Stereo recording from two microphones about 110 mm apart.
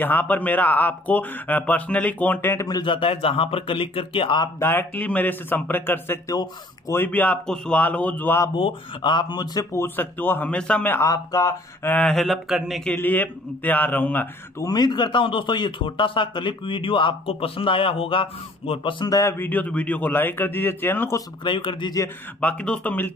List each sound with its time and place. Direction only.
0.0 s speech: 15° left (ahead or behind)
2.8 s a man's voice: 50° left (ahead or behind)
4.6 s speech: 20° left (ahead or behind)
6.2 s speech: 35° left (ahead or behind)
6.9 s speech: 20° left (ahead or behind)
8.5 s a man's voice: 50° left (ahead or behind)
9.7 s a man's voice: 20° left (ahead or behind)
11.1 s speech: 30° left (ahead or behind)
12.0 s speech: 5° left (ahead or behind)
12.9 s speech: 15° left (ahead or behind)
14.6 s a man's voice: 40° left (ahead or behind)
19.0 s a man's voice: 30° left (ahead or behind)
21.5 s a man's voice: 45° left (ahead or behind)
22.4 s speech: 10° left (ahead or behind)